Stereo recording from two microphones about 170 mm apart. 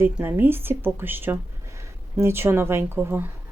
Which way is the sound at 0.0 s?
10° right (ahead or behind).